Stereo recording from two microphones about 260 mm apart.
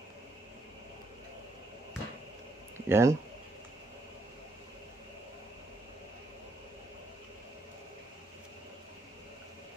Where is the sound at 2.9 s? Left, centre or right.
Centre.